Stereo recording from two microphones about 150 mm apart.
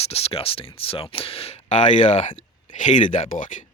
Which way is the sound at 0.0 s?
40° left (ahead or behind).